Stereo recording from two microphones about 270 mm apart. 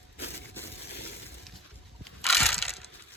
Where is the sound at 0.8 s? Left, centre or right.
Left.